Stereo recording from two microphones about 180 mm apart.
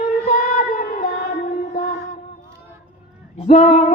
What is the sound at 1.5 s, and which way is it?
Mantra, 50° left (ahead or behind).